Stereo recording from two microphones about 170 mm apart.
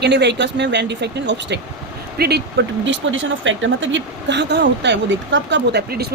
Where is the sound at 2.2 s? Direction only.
70° right (ahead or behind).